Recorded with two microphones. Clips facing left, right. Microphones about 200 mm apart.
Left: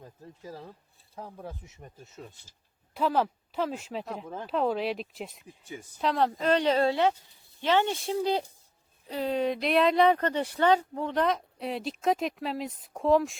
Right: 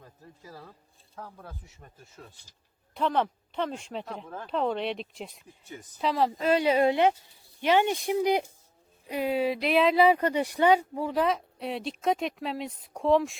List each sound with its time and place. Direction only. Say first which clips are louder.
0.0 s speech: left 5 dB; 20° left (ahead or behind)
2.9 s speech: even; 5° left (ahead or behind)